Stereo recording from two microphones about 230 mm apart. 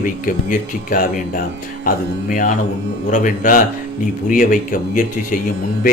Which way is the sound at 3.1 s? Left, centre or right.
Left.